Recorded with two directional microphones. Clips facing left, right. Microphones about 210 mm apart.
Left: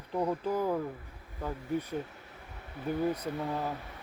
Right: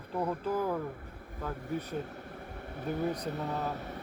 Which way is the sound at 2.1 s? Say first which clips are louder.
Right 7 dB; 50° right (ahead or behind).